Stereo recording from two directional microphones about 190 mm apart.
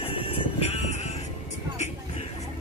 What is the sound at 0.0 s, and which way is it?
Music, 30° left (ahead or behind).